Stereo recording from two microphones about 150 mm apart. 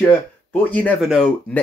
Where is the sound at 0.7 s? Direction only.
10° left (ahead or behind).